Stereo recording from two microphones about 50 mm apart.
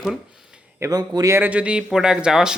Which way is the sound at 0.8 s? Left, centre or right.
Right.